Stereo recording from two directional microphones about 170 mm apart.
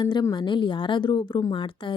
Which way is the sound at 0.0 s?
25° left (ahead or behind).